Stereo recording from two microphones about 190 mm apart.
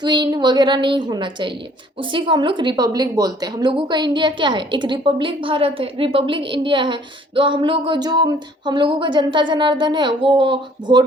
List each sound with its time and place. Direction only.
0.0 s a woman's voice: 20° right (ahead or behind)